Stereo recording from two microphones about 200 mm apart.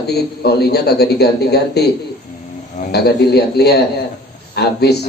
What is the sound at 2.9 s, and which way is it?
A man's voice, 55° left (ahead or behind).